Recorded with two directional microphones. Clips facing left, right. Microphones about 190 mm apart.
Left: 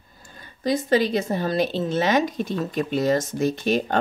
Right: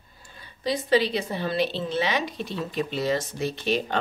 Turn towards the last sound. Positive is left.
turn(degrees=45)  # may be behind; listen again after turning